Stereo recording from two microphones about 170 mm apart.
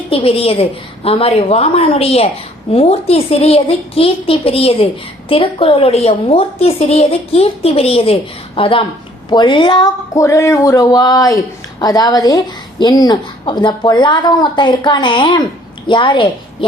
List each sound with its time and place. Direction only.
0.1 s a woman's voice: 35° left (ahead or behind)